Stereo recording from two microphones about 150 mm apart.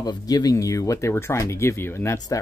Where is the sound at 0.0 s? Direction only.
25° left (ahead or behind).